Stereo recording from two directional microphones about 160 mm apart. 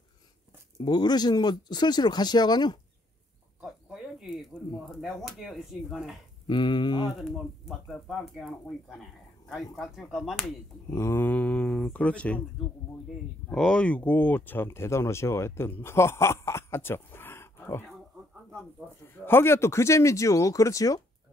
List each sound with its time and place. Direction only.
0.7 s speech: 25° left (ahead or behind)
3.6 s cricket: centre (ahead or behind)
5.0 s speech: centre (ahead or behind)
6.4 s speech: 30° left (ahead or behind)
7.2 s speech: centre (ahead or behind)
10.9 s speech: 15° left (ahead or behind)
13.5 s speech: 5° left (ahead or behind)
19.0 s speech: 15° left (ahead or behind)